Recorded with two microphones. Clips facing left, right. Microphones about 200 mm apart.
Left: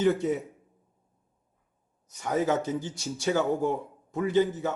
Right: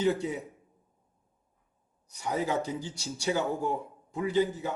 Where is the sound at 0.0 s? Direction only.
50° left (ahead or behind).